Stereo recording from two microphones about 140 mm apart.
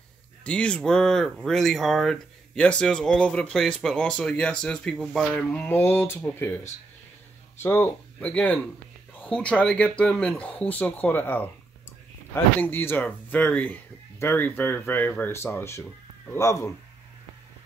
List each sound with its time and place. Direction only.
0.4 s speech: 5° left (ahead or behind)
12.5 s speech: 15° left (ahead or behind)